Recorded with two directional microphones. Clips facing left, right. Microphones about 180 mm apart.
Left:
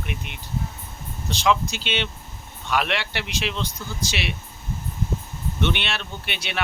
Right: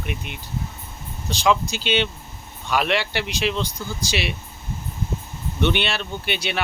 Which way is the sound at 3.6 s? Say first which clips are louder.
Right 2 dB; 35° right (ahead or behind).